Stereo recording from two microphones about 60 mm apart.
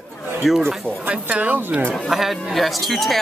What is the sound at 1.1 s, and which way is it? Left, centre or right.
Speech, right.